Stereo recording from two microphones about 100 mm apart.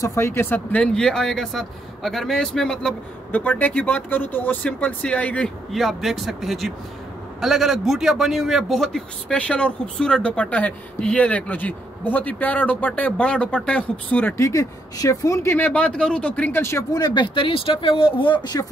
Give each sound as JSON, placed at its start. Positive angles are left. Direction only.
{"t": 0.0, "sound": "a man's voice", "side_deg": 25}
{"t": 3.3, "sound": "a man's voice", "side_deg": 15}
{"t": 5.7, "sound": "a man's voice", "side_deg": 0}
{"t": 14.3, "sound": "speech", "side_deg": 30}
{"t": 15.5, "sound": "a man's voice", "side_deg": 15}
{"t": 16.9, "sound": "speech", "side_deg": 45}